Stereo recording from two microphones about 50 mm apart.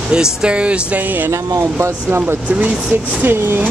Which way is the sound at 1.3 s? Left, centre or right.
Right.